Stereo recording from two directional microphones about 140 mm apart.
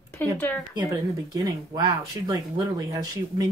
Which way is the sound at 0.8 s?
25° right (ahead or behind).